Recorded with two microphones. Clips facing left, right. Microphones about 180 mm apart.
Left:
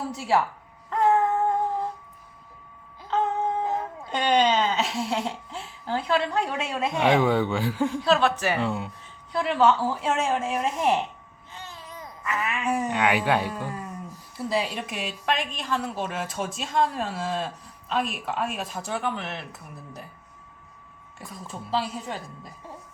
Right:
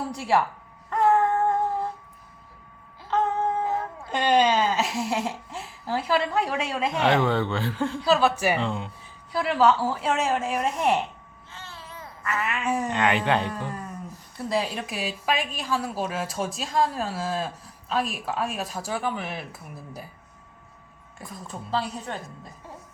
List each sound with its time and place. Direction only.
0.0 s speech: centre (ahead or behind)
0.9 s a sound: centre (ahead or behind)
3.1 s music: centre (ahead or behind)
4.0 s a woman's voice: centre (ahead or behind)
8.0 s a woman's voice: 5° right (ahead or behind)
8.5 s a woman's voice: 5° left (ahead or behind)
11.5 s a sound: 15° left (ahead or behind)
12.5 s a woman's voice: centre (ahead or behind)
21.2 s a woman's voice: centre (ahead or behind)